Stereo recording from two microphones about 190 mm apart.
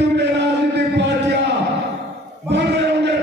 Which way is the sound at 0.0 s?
65° right (ahead or behind).